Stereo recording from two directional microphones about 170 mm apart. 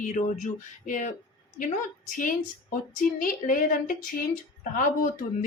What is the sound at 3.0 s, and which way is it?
A woman's voice, 55° left (ahead or behind).